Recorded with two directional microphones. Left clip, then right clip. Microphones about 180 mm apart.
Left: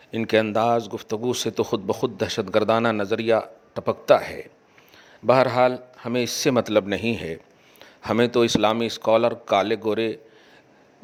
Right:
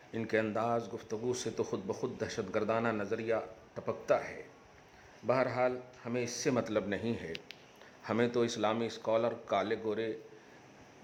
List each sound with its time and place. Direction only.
0.1 s speech: 45° left (ahead or behind)